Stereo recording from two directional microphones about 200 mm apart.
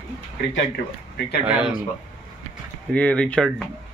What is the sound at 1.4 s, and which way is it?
Speech, 5° right (ahead or behind).